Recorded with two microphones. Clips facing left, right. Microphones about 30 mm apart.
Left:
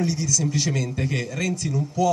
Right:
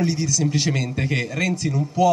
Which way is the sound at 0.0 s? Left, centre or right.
Right.